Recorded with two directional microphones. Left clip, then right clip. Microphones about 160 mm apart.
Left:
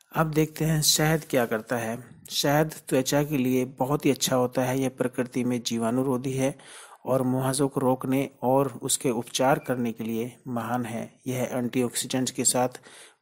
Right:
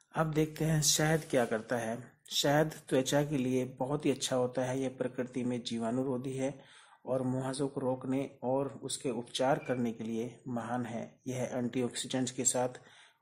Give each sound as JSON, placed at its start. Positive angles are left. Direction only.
{"t": 0.1, "sound": "speech", "side_deg": 25}